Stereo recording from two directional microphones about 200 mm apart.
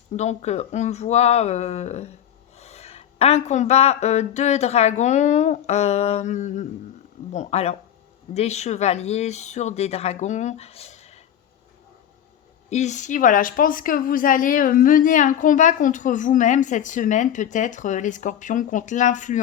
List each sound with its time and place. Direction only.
0.2 s a woman's voice: 35° left (ahead or behind)
12.7 s a woman's voice: 35° left (ahead or behind)